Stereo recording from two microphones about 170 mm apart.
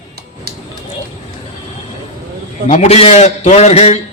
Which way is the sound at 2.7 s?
40° left (ahead or behind).